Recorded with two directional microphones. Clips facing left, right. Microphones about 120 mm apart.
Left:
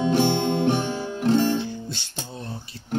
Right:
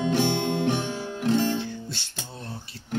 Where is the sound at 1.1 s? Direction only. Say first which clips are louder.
Left 3 dB; 35° left (ahead or behind).